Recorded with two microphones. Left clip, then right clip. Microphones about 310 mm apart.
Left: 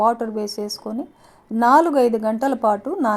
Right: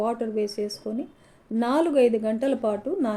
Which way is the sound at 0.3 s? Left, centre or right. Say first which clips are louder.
Left 1 dB; left.